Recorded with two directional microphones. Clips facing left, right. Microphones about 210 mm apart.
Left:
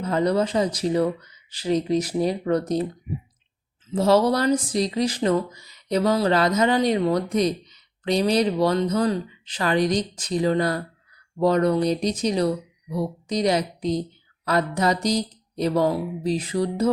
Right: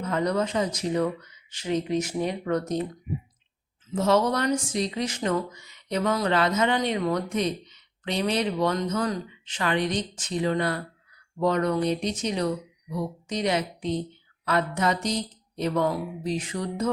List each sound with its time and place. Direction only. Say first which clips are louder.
0.0 s speech: left 4 dB; 30° left (ahead or behind)
3.9 s speech: left 4 dB; 35° left (ahead or behind)